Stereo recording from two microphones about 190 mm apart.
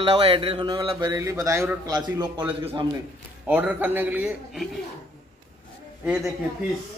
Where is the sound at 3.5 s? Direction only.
10° right (ahead or behind).